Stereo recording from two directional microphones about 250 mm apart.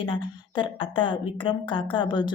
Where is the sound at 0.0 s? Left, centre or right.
Centre.